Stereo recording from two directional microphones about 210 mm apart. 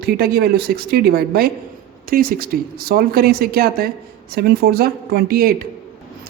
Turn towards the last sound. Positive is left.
turn(degrees=-45)  # may be behind; listen again after turning